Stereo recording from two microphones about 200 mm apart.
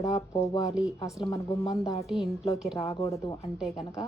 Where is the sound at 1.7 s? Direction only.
Centre (ahead or behind).